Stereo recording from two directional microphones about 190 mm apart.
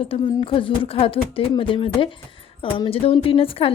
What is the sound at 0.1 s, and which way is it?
A woman's voice, 30° left (ahead or behind).